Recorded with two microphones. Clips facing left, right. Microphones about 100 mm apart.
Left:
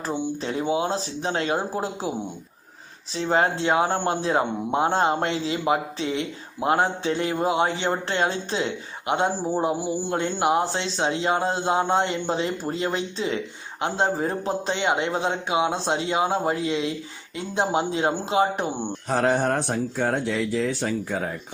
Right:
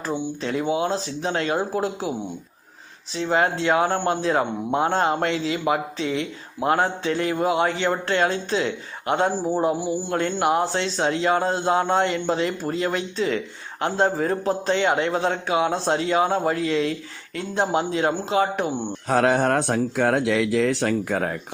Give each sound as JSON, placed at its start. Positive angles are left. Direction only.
{"t": 0.6, "sound": "a man's voice", "side_deg": 25}
{"t": 3.2, "sound": "a man's voice", "side_deg": 35}
{"t": 19.0, "sound": "speech", "side_deg": -90}